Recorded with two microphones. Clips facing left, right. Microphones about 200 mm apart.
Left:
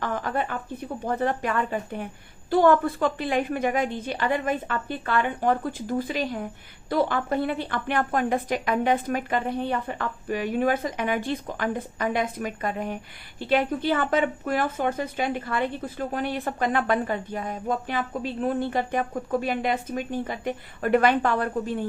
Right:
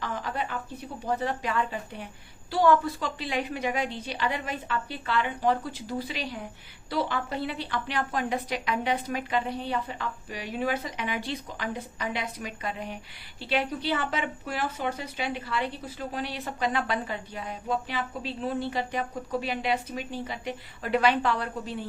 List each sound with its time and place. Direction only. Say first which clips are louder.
0.0 s a woman's voice: left 5 dB; 50° left (ahead or behind)